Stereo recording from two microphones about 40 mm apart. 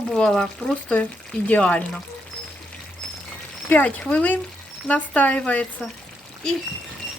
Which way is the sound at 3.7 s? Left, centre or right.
Left.